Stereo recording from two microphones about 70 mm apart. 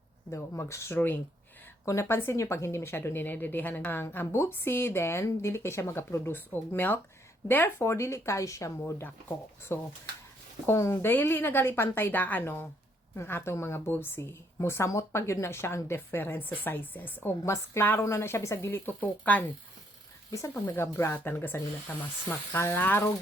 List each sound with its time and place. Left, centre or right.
0.3 s speech: left
0.9 s speech: left
1.8 s speech: left
10.7 s speech: left
18.7 s speech: left
20.5 s speech: left